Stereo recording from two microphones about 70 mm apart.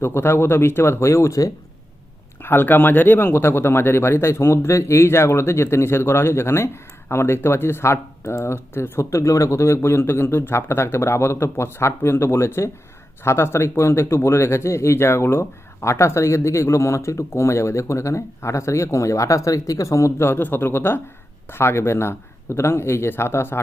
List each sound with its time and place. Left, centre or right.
0.0 s speech: left
2.4 s speech: left